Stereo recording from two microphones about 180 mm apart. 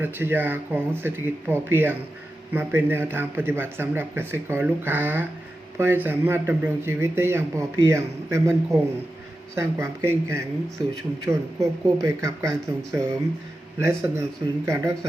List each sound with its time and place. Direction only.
0.0 s speech: 10° right (ahead or behind)
9.6 s speech: 15° right (ahead or behind)